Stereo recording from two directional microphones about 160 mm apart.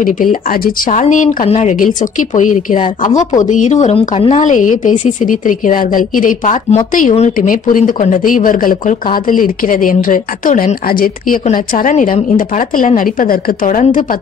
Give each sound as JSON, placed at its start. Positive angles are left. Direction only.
{"t": 0.0, "sound": "a woman's voice", "side_deg": 55}